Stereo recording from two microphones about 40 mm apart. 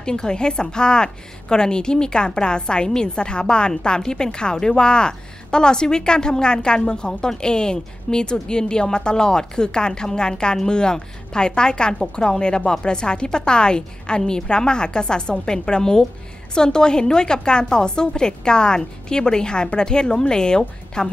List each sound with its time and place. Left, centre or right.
0.0 s a woman's voice: centre